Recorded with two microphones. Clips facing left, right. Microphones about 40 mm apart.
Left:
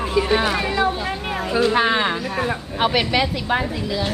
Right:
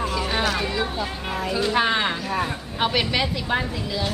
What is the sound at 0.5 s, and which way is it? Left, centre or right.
A woman's voice, centre.